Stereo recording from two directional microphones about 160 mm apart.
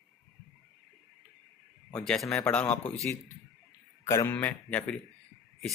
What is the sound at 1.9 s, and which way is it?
Speech, 5° left (ahead or behind).